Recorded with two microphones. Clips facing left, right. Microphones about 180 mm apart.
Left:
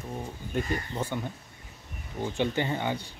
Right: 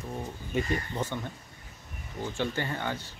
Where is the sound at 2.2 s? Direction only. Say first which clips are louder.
Left 3 dB; 20° left (ahead or behind).